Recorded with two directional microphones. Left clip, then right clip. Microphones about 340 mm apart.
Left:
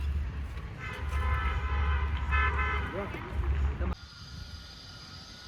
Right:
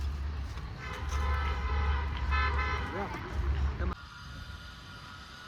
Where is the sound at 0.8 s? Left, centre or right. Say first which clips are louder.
Left 1 dB; right.